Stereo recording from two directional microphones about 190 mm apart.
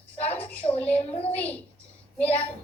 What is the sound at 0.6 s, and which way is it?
Child singing, 30° left (ahead or behind).